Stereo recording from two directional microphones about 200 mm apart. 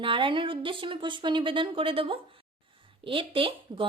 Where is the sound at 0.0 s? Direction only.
25° right (ahead or behind).